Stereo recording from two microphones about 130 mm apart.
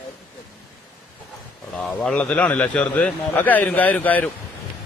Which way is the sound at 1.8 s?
5° left (ahead or behind).